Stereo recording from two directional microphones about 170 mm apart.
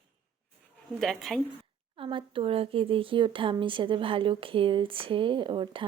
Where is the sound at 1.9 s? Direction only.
30° right (ahead or behind).